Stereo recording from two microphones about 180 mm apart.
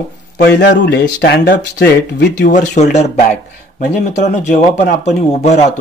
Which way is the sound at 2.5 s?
40° left (ahead or behind).